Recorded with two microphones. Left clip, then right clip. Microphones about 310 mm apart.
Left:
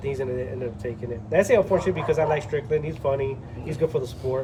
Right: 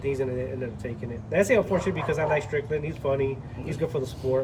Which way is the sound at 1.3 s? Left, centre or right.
Centre.